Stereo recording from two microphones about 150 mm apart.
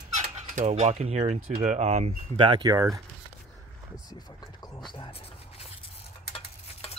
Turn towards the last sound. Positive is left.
turn(degrees=40)  # may be behind; listen again after turning